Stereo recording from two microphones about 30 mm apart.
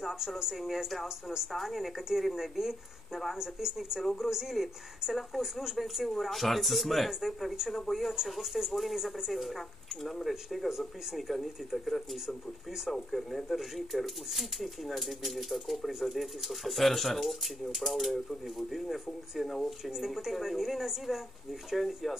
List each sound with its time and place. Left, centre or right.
0.1 s speech: centre
7.1 s speech: centre
19.4 s speech: centre
19.8 s speech: centre